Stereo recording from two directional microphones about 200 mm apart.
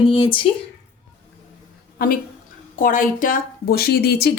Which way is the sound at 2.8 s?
40° left (ahead or behind).